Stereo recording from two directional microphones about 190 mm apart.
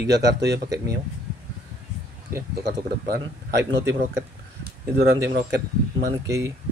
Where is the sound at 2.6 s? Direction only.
60° right (ahead or behind).